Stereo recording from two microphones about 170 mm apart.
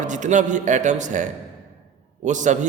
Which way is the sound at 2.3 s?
45° right (ahead or behind).